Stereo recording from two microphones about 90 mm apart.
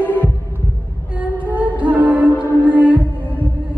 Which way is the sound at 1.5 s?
15° right (ahead or behind).